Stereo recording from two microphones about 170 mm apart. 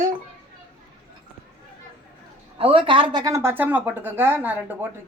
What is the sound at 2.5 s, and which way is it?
Speech, 30° right (ahead or behind).